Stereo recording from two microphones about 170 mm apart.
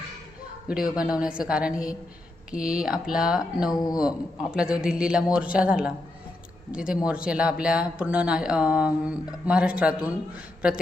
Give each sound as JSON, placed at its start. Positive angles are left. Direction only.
{"t": 0.7, "sound": "a man's voice", "side_deg": -5}
{"t": 3.7, "sound": "speech", "side_deg": 20}
{"t": 4.5, "sound": "a man's voice", "side_deg": -5}